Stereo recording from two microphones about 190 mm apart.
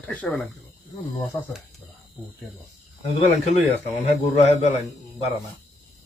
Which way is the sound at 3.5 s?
35° left (ahead or behind).